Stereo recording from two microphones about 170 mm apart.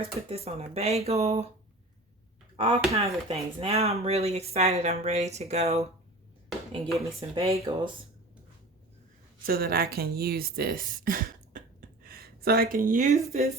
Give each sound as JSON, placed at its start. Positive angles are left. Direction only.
{"t": 0.0, "sound": "speech", "side_deg": -35}
{"t": 2.6, "sound": "speech", "side_deg": -35}
{"t": 6.8, "sound": "speech", "side_deg": 0}
{"t": 7.7, "sound": "speech", "side_deg": -30}
{"t": 9.5, "sound": "speech", "side_deg": -60}